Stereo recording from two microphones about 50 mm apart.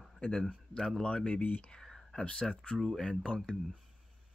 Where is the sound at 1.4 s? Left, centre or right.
Left.